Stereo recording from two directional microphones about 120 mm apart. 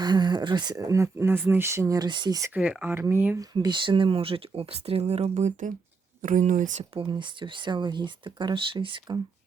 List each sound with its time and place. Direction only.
0.0 s speech: 35° right (ahead or behind)
2.0 s speech: 40° right (ahead or behind)
2.6 s speech: 10° right (ahead or behind)
3.5 s speech: 40° right (ahead or behind); by 6.8 s 85° right
6.9 s speech: 45° right (ahead or behind)